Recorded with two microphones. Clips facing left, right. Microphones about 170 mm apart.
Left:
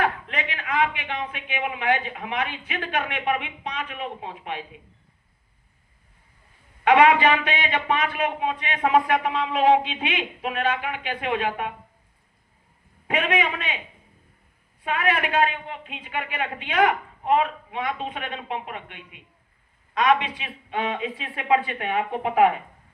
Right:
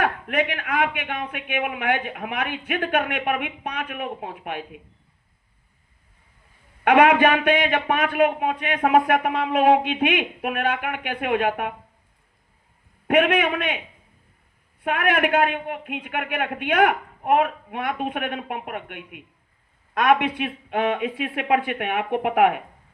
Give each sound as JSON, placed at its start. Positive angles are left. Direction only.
{"t": 0.0, "sound": "a man's voice", "side_deg": -55}
{"t": 6.8, "sound": "a man's voice", "side_deg": -55}
{"t": 13.1, "sound": "a man's voice", "side_deg": -60}
{"t": 14.8, "sound": "a man's voice", "side_deg": -60}